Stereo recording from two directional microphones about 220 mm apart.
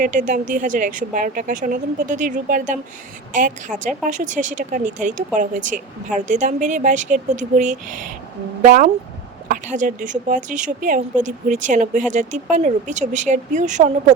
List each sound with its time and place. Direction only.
0.0 s speech: 35° right (ahead or behind)